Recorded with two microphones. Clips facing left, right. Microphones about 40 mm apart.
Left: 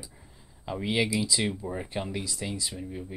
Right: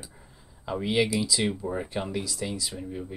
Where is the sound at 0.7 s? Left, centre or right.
Centre.